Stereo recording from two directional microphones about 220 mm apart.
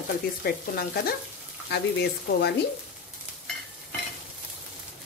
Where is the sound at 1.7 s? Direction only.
50° left (ahead or behind).